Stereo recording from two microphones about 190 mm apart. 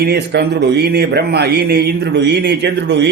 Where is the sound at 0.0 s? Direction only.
60° right (ahead or behind).